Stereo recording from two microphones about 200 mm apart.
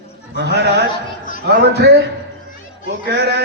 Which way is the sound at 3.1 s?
55° right (ahead or behind).